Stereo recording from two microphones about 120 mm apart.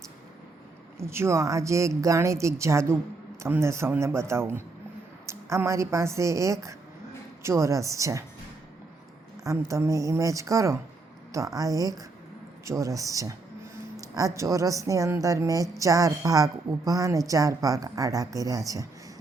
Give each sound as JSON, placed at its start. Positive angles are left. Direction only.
{"t": 0.9, "sound": "a woman's voice", "side_deg": -20}
{"t": 9.4, "sound": "a woman's voice", "side_deg": -25}